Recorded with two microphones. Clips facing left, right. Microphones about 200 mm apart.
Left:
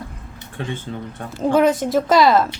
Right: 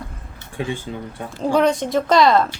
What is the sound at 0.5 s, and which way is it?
Speech, 10° right (ahead or behind).